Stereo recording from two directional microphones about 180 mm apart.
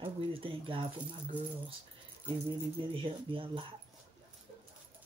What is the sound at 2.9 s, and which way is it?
Speech, 30° right (ahead or behind).